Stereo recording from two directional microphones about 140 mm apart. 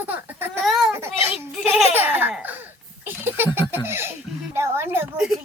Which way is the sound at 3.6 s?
15° right (ahead or behind).